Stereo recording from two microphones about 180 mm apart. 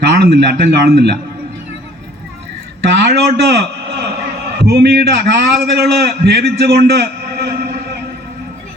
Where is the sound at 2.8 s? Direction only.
65° right (ahead or behind).